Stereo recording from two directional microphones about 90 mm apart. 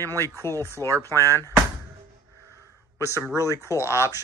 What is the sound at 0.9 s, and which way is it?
Speech, 35° right (ahead or behind).